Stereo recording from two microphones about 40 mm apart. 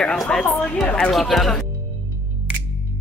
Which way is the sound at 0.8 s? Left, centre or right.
Left.